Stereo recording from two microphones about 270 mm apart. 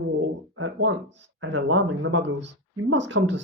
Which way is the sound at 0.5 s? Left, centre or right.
Right.